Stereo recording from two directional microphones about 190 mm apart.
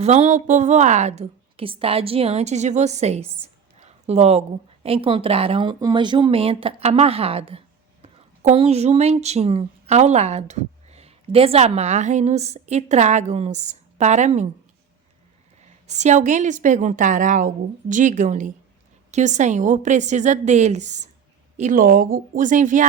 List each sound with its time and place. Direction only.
0.0 s a woman's voice: 35° right (ahead or behind)
15.9 s a woman's voice: 35° right (ahead or behind)